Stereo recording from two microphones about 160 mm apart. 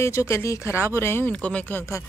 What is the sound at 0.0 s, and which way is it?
Speech, 20° left (ahead or behind).